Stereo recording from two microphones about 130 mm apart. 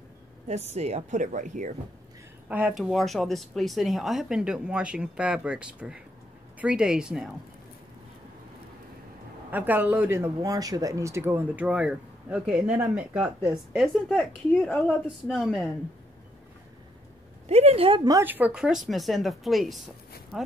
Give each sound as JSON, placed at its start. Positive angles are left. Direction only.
{"t": 0.5, "sound": "speech", "side_deg": -55}
{"t": 2.4, "sound": "a woman's voice", "side_deg": -10}
{"t": 9.5, "sound": "speech", "side_deg": -15}
{"t": 13.7, "sound": "a woman's voice", "side_deg": 5}
{"t": 17.5, "sound": "speech", "side_deg": -50}
{"t": 18.2, "sound": "a woman's voice", "side_deg": -15}